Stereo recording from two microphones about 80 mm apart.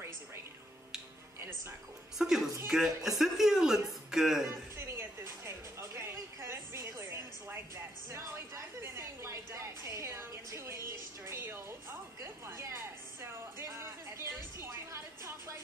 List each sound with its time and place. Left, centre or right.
2.1 s speech: centre
4.7 s music: right
11.2 s speech: right
12.2 s music: right